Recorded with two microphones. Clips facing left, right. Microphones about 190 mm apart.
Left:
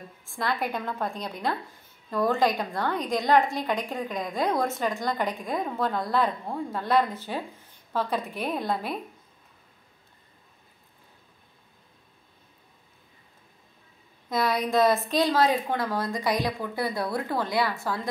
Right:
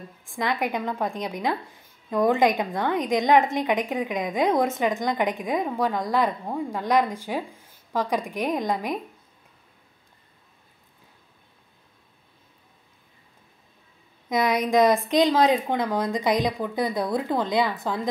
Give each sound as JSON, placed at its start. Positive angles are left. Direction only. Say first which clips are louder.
{"t": 0.3, "sound": "a woman's voice", "louder": "right 3 dB", "side_deg": -15}
{"t": 14.3, "sound": "a woman's voice", "louder": "right 3 dB", "side_deg": -20}